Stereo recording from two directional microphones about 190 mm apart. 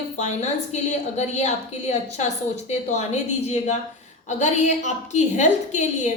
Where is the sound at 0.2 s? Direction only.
35° left (ahead or behind).